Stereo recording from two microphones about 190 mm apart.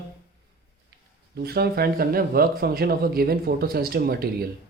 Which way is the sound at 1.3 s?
55° right (ahead or behind).